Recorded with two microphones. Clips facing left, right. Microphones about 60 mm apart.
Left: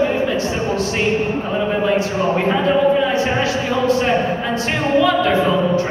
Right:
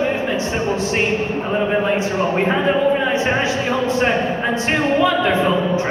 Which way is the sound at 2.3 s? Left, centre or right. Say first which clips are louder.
Left 1 dB; right.